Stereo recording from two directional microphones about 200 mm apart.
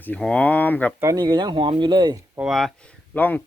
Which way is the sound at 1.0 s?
20° right (ahead or behind).